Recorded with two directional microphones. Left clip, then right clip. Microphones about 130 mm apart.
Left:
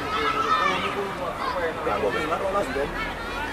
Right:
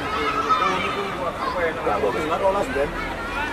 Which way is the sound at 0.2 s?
25° left (ahead or behind).